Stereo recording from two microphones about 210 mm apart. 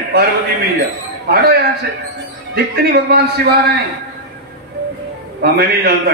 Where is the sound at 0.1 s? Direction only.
50° right (ahead or behind).